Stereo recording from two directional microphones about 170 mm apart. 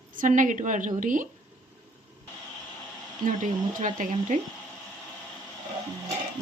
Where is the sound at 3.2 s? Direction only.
50° right (ahead or behind).